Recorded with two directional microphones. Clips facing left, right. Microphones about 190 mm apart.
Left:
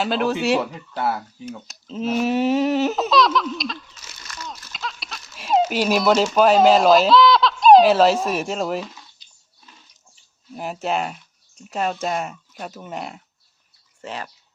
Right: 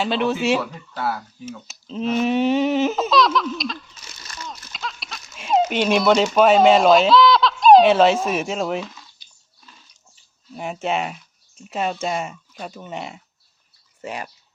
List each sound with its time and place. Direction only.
0.0 s speech: centre (ahead or behind)
0.6 s speech: 20° left (ahead or behind)
1.5 s speech: centre (ahead or behind)
10.5 s speech: centre (ahead or behind)
14.0 s speech: 15° right (ahead or behind)